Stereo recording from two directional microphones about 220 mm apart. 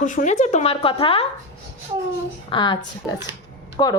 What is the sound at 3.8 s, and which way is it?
Speech, 20° left (ahead or behind).